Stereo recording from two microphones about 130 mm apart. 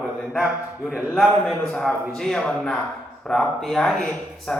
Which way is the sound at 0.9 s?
5° right (ahead or behind).